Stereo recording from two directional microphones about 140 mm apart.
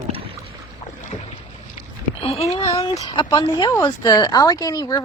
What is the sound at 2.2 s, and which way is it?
Speech, 45° left (ahead or behind).